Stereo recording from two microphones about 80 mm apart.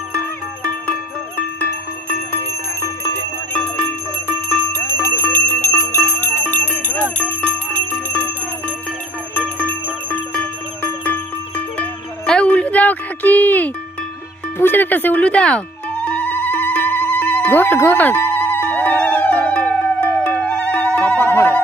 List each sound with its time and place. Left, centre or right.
5.2 s bicycle bell: left
6.1 s bell: left
7.2 s music: centre